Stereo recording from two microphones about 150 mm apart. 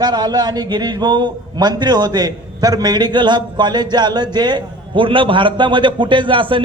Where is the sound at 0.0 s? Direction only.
25° right (ahead or behind).